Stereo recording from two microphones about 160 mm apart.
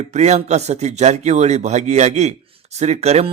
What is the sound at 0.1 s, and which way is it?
Speech, 45° right (ahead or behind).